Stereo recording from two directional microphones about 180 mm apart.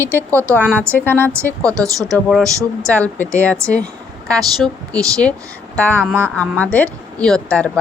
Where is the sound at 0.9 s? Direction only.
10° left (ahead or behind).